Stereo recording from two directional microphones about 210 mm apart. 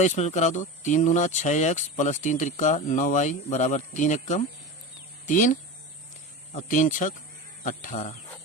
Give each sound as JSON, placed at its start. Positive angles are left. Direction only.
{"t": 0.0, "sound": "speech", "side_deg": 35}